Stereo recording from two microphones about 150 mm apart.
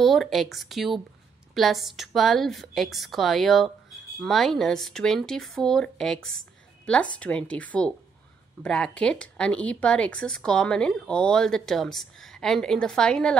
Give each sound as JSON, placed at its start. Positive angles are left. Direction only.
{"t": 0.0, "sound": "a woman's voice", "side_deg": 0}